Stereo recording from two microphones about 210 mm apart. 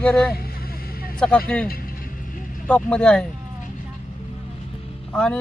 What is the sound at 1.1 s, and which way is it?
Speech, 5° left (ahead or behind).